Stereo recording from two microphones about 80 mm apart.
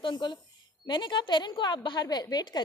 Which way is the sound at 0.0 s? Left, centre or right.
Left.